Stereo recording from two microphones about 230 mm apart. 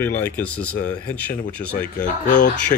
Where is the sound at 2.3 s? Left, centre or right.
Left.